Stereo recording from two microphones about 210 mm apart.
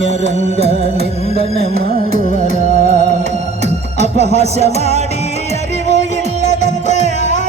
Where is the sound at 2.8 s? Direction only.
40° left (ahead or behind).